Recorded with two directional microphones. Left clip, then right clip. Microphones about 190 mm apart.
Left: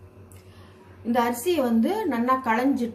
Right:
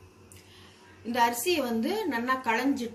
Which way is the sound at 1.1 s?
35° left (ahead or behind).